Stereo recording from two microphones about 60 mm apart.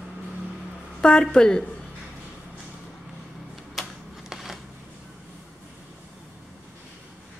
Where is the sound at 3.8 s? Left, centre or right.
Centre.